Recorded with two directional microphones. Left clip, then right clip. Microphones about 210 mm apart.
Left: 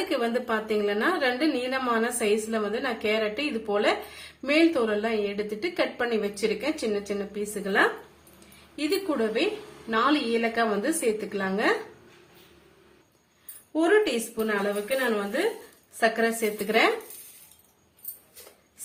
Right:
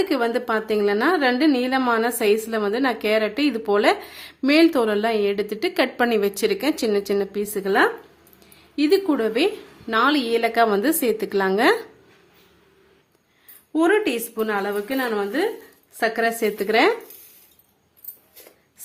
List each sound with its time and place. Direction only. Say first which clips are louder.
0.1 s a woman's voice: right 5 dB; 55° right (ahead or behind)
13.7 s a woman's voice: right 3 dB; 50° right (ahead or behind)
16.0 s a woman's voice: right 3 dB; 55° right (ahead or behind)